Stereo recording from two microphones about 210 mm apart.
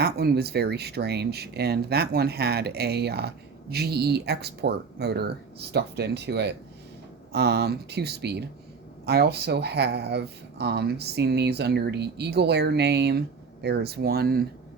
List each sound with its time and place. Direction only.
0.0 s speech: 50° right (ahead or behind)